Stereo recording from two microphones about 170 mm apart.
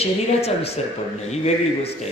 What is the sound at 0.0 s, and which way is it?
Speech, 35° left (ahead or behind).